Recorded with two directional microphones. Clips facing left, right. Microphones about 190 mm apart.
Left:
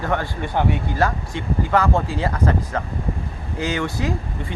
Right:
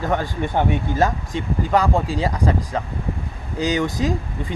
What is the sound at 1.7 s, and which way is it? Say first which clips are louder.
Speech: right 1 dB; 15° right (ahead or behind).